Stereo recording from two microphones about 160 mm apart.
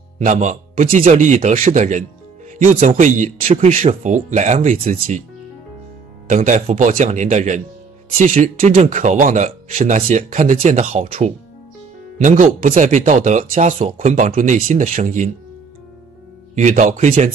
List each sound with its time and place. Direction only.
0.2 s speech: 50° right (ahead or behind)
6.2 s speech: 50° right (ahead or behind)
16.5 s speech: 50° right (ahead or behind)